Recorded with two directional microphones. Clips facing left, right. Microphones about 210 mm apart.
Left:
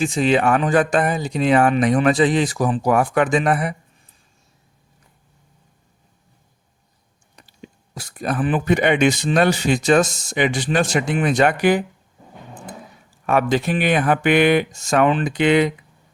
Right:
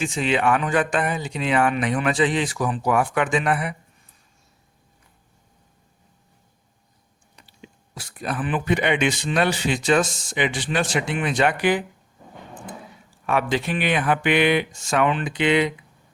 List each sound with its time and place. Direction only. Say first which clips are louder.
0.0 s speech: left 5 dB; 40° left (ahead or behind)
7.4 s speech: left 5 dB; 45° left (ahead or behind)
13.2 s speech: left 4 dB; 45° left (ahead or behind)